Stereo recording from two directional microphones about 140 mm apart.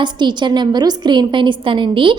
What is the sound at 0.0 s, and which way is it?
A woman's voice, 35° right (ahead or behind).